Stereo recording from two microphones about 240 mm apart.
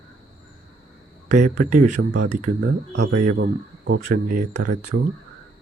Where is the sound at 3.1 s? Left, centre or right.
Right.